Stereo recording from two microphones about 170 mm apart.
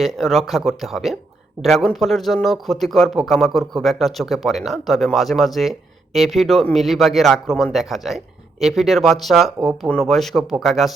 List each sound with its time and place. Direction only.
0.0 s speech: centre (ahead or behind)